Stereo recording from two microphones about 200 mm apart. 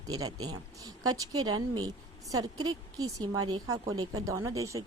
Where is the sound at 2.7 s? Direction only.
20° right (ahead or behind).